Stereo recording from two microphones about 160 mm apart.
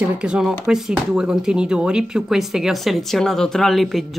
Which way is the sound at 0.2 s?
5° right (ahead or behind).